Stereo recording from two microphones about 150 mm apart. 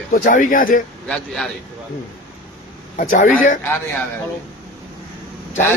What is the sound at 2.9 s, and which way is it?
Speech, 65° left (ahead or behind).